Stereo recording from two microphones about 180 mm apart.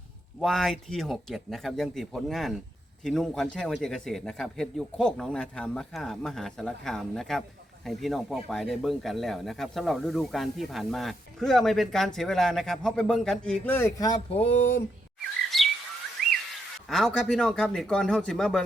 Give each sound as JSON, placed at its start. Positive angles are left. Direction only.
{"t": 0.3, "sound": "speech", "side_deg": 0}
{"t": 14.3, "sound": "a sound", "side_deg": 35}
{"t": 15.4, "sound": "chirp", "side_deg": 0}
{"t": 16.9, "sound": "speech", "side_deg": 0}